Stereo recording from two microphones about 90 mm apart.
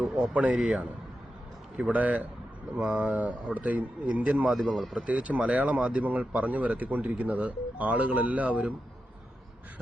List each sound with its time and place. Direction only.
0.3 s speech: 15° right (ahead or behind)